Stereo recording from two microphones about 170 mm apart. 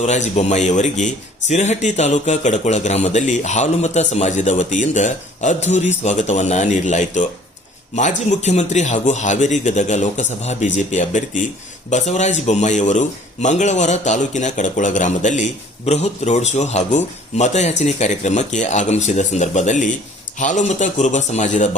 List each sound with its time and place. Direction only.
0.0 s a man's voice: 45° left (ahead or behind)